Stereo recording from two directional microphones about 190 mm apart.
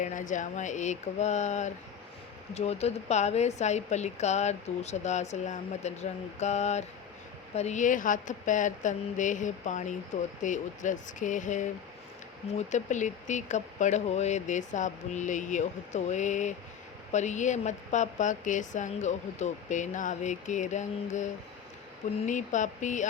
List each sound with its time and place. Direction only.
0.0 s a woman's voice: 40° left (ahead or behind)
22.3 s a woman's voice: 40° left (ahead or behind)